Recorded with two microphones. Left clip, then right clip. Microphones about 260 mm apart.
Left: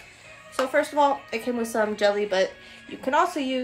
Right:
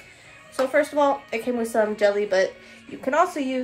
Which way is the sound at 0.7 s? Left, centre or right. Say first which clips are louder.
Right 1 dB; centre.